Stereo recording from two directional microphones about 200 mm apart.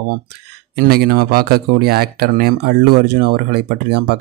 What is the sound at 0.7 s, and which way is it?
Speech, 50° right (ahead or behind).